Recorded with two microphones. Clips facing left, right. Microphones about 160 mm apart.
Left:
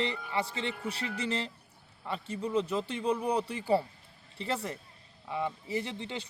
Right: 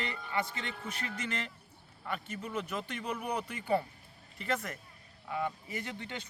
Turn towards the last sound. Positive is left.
turn(degrees=25)  # may be behind; listen again after turning